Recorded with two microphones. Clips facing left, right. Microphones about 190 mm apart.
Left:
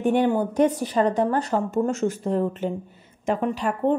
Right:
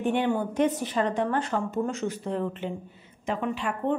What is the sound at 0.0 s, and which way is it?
A woman's voice, 40° left (ahead or behind).